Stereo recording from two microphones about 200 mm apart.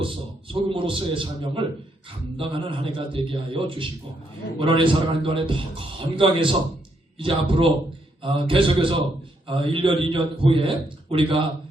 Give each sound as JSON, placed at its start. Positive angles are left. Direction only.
{"t": 0.0, "sound": "a man's voice", "side_deg": -25}